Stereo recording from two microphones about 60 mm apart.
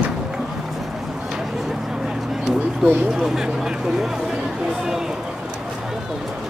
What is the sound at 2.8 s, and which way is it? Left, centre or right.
Speech, centre.